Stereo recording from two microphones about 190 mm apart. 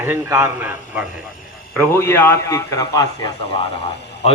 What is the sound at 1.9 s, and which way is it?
A man's voice, 10° left (ahead or behind).